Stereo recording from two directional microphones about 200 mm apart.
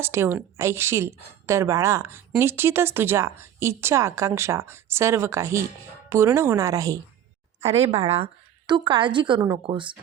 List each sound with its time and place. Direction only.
0.0 s a woman's voice: 10° right (ahead or behind)
7.6 s a woman's voice: 30° right (ahead or behind)